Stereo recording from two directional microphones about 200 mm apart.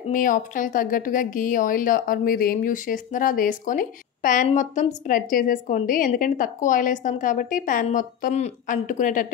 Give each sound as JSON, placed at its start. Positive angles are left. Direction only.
{"t": 0.1, "sound": "a woman's voice", "side_deg": 40}